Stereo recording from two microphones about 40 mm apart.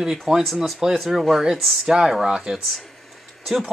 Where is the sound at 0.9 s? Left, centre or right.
Centre.